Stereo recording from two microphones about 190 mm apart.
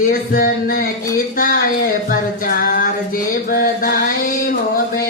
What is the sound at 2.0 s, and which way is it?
Music, 50° left (ahead or behind).